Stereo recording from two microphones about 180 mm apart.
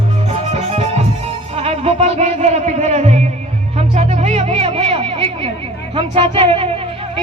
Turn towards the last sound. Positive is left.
turn(degrees=-30)  # may be behind; listen again after turning